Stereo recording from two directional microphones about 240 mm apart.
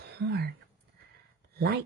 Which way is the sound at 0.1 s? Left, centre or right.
Right.